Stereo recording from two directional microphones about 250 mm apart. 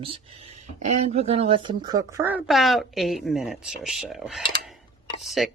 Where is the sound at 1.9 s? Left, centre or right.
Centre.